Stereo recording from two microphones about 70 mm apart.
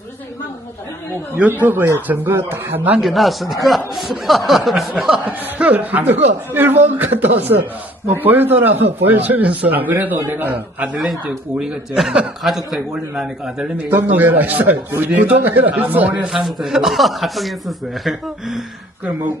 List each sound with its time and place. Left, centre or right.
1.6 s speech: right
3.0 s a man's voice: centre
5.2 s speech: right
11.6 s a man's voice: centre
13.9 s speech: right
16.2 s a man's voice: centre